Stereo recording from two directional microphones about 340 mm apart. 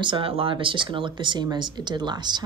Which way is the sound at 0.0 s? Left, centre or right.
Centre.